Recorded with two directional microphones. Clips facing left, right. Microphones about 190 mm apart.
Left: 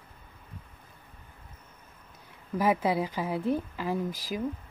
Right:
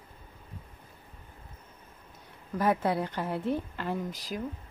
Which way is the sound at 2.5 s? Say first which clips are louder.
Left 1 dB; 5° left (ahead or behind).